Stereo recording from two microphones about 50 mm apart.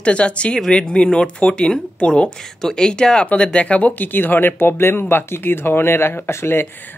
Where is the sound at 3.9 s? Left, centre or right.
Left.